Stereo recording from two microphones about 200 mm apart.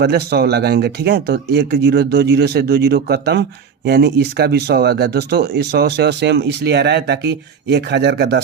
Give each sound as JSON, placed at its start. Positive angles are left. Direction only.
{"t": 0.0, "sound": "speech", "side_deg": -55}